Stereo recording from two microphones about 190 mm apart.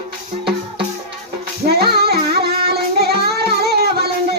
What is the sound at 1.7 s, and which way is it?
Music, 55° right (ahead or behind).